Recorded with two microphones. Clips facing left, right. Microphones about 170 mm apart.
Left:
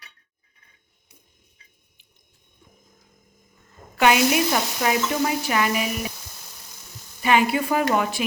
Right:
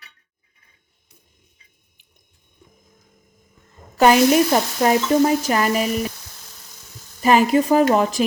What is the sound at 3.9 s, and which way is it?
Stir, 40° right (ahead or behind).